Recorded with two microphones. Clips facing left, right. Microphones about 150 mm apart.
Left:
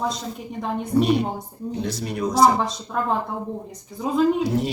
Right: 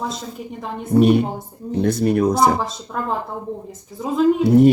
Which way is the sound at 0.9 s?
50° right (ahead or behind).